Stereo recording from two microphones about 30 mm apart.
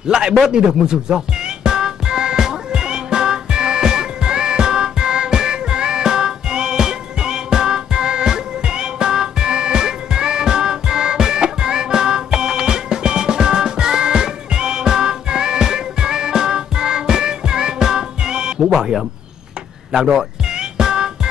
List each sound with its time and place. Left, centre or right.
0.5 s music: right
19.9 s speech: centre
20.4 s music: right